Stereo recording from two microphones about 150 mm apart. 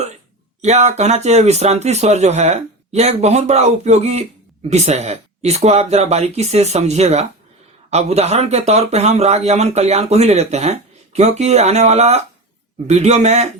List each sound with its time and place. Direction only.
0.6 s speech: 50° right (ahead or behind)